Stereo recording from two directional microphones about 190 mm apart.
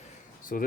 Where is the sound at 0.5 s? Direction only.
45° left (ahead or behind).